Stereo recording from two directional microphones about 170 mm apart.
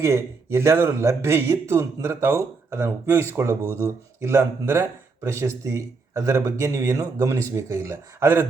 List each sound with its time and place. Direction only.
0.0 s speech: 15° right (ahead or behind)